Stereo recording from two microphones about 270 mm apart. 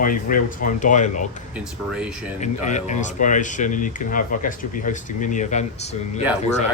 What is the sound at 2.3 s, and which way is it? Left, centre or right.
Speech, left.